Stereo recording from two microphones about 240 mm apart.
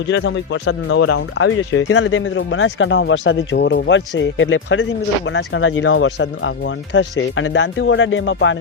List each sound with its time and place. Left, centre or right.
0.1 s speech: left
1.0 s speech: left